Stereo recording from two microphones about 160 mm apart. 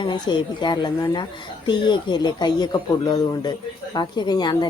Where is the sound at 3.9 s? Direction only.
25° left (ahead or behind).